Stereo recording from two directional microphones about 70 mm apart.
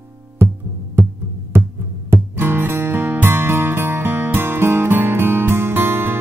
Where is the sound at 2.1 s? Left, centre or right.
Right.